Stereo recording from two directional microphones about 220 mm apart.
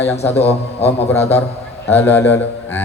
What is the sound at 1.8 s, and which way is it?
Speech, 10° left (ahead or behind).